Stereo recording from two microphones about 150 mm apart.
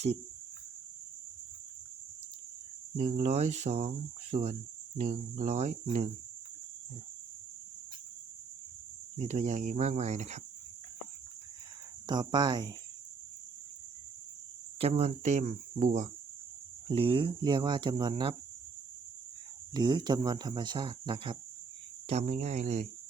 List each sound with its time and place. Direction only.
2.9 s cricket: 50° right (ahead or behind)
9.1 s cricket: 50° right (ahead or behind)
12.0 s speech: 30° right (ahead or behind)
14.8 s cricket: 45° right (ahead or behind)
16.9 s speech: 35° right (ahead or behind)
19.7 s speech: 30° right (ahead or behind)
22.0 s cricket: 45° right (ahead or behind)